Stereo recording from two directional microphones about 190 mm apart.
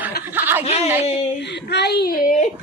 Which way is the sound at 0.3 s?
10° right (ahead or behind).